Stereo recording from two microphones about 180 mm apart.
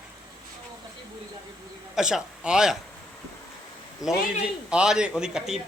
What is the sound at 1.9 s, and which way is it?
Speech, 5° right (ahead or behind).